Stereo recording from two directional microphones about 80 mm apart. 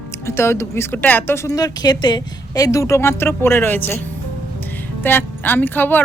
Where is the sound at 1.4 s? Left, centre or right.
Left.